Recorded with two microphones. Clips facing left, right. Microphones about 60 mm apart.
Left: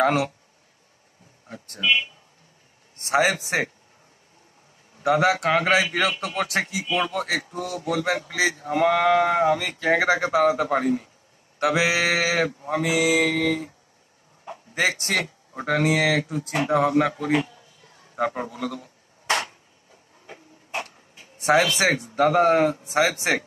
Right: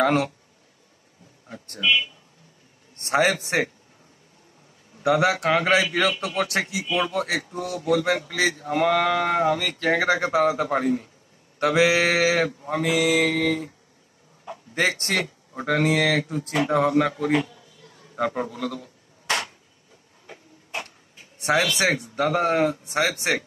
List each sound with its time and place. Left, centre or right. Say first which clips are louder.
0.0 s speech: even; centre
3.1 s speech: even; centre
4.9 s speech: even; centre
8.3 s speech: even; centre
13.3 s speech: even; centre
17.1 s a man's voice: right 1 dB; left
17.6 s a sound: right 2 dB; left
18.1 s a sound: even; centre; by 19.5 s left
21.4 s speech: left 2 dB; centre